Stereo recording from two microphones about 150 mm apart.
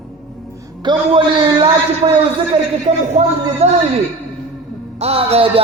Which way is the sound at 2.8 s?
50° right (ahead or behind).